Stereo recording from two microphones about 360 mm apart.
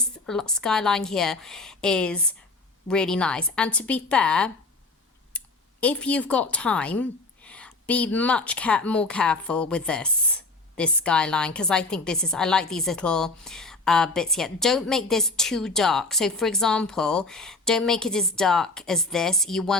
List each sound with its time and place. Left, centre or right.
0.0 s a woman's voice: centre
5.3 s a sound: centre
5.8 s a woman's voice: centre